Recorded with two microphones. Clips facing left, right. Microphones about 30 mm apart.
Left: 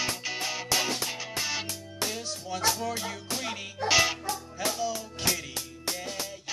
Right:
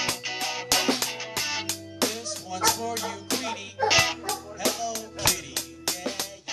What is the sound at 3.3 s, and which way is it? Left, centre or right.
Music, right.